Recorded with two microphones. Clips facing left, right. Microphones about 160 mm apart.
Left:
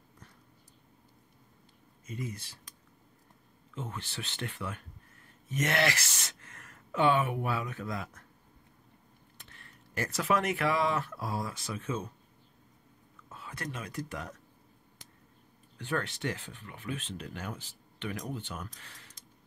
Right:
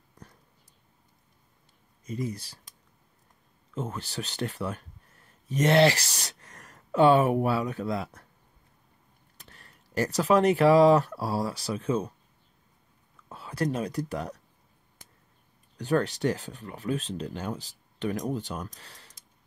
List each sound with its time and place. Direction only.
2.0 s speech: 35° right (ahead or behind)
3.7 s speech: 40° right (ahead or behind)
9.4 s speech: 40° right (ahead or behind)
13.3 s speech: 35° right (ahead or behind)
15.8 s speech: 35° right (ahead or behind)